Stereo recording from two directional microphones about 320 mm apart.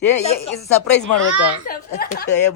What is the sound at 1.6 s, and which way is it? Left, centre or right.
Speech, left.